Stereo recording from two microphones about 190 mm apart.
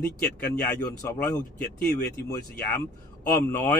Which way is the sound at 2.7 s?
15° left (ahead or behind).